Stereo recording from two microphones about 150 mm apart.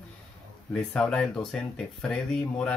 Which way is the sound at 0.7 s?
5° left (ahead or behind).